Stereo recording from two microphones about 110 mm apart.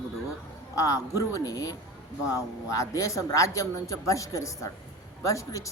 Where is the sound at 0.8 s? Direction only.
30° left (ahead or behind).